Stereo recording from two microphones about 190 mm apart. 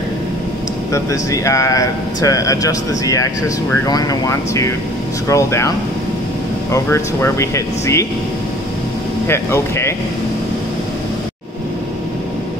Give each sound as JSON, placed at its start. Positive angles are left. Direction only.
{"t": 0.9, "sound": "speech", "side_deg": 15}
{"t": 6.7, "sound": "speech", "side_deg": 15}
{"t": 9.3, "sound": "speech", "side_deg": 15}